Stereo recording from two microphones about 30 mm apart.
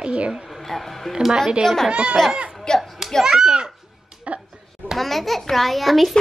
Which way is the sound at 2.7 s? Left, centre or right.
Left.